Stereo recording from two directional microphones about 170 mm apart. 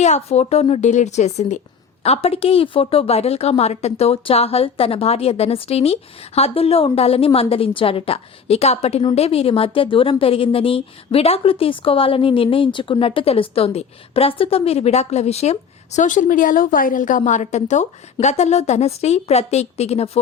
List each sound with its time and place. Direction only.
0.0 s a woman's voice: 40° left (ahead or behind)